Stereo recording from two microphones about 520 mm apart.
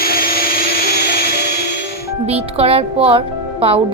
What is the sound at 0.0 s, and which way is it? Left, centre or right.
Vacuum cleaner, centre.